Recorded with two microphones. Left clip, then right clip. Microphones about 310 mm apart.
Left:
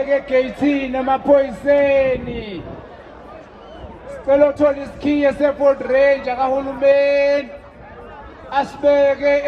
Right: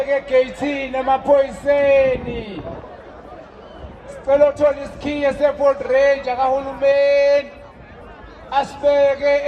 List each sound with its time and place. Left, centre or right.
0.0 s music: right
4.3 s music: right
5.5 s speech: right
8.8 s speech: right